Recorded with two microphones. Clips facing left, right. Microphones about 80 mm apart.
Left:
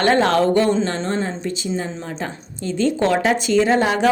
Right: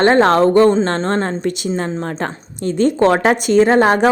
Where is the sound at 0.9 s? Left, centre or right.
Right.